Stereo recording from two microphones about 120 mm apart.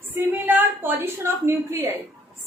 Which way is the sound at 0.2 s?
15° right (ahead or behind).